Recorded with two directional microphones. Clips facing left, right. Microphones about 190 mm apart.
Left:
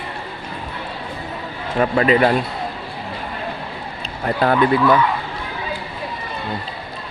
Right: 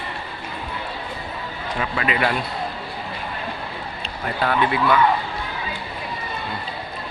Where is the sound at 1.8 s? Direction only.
35° left (ahead or behind).